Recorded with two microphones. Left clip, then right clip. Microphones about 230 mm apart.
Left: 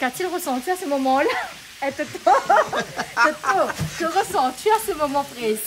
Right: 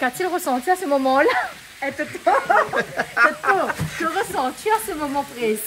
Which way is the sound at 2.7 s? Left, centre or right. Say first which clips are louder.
Right 2 dB; centre.